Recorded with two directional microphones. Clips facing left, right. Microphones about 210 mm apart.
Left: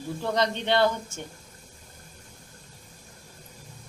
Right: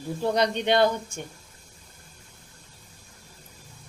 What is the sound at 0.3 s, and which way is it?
Speech, 15° right (ahead or behind).